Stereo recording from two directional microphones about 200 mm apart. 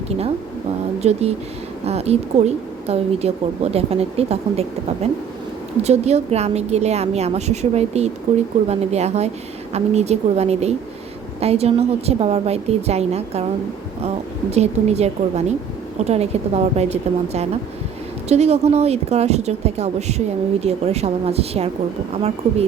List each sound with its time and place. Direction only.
1.0 s speech: 30° right (ahead or behind)
5.8 s speech: 35° right (ahead or behind)
14.5 s speech: 30° right (ahead or behind)